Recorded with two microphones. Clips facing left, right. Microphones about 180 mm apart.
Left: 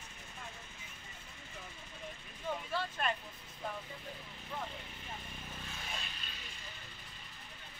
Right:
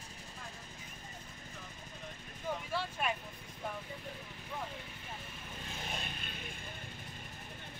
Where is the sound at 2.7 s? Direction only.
10° right (ahead or behind).